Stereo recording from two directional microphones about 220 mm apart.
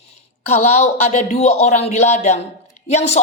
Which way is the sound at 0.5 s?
30° left (ahead or behind).